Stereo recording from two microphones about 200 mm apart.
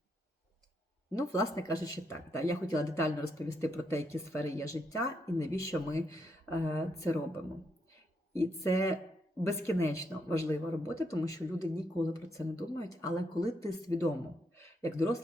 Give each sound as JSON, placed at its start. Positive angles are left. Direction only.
{"t": 1.2, "sound": "speech", "side_deg": 15}
{"t": 8.3, "sound": "speech", "side_deg": 15}
{"t": 14.6, "sound": "a sound", "side_deg": 15}